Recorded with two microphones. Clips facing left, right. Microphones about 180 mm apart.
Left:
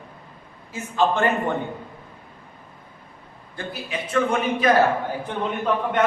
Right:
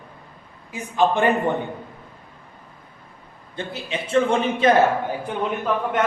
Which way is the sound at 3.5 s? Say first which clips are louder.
Right 2 dB; 25° right (ahead or behind).